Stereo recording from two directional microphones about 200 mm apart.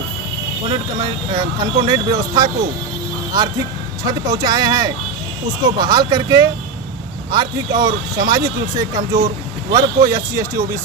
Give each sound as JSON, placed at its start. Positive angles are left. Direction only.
{"t": 0.7, "sound": "speech", "side_deg": -20}
{"t": 4.0, "sound": "speech", "side_deg": -20}